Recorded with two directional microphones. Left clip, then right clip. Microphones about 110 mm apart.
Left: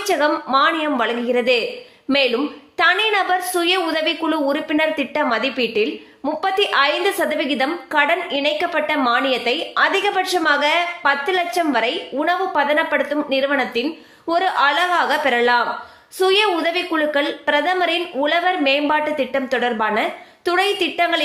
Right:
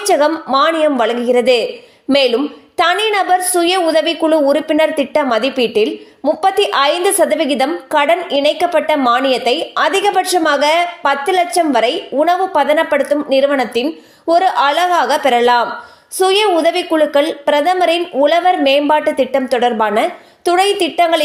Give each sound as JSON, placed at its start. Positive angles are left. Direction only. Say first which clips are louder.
{"t": 0.0, "sound": "a woman's voice", "louder": "right 5 dB", "side_deg": -45}